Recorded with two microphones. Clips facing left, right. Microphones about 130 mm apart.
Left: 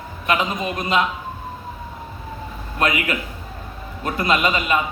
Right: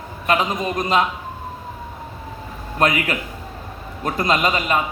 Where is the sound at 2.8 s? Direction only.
40° right (ahead or behind).